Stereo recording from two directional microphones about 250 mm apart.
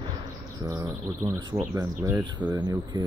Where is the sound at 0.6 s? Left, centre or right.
Centre.